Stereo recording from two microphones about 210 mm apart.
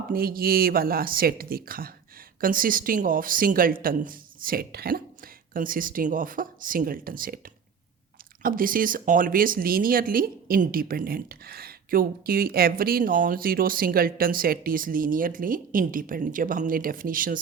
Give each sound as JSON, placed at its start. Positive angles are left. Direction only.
{"t": 0.1, "sound": "speech", "side_deg": -45}